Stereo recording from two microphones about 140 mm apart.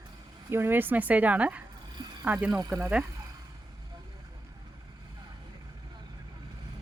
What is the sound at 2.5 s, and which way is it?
Speech, 20° right (ahead or behind).